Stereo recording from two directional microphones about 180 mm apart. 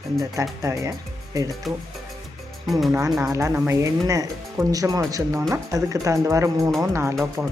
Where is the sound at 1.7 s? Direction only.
Centre (ahead or behind).